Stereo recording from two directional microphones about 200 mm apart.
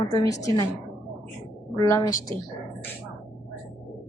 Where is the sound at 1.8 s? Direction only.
15° left (ahead or behind).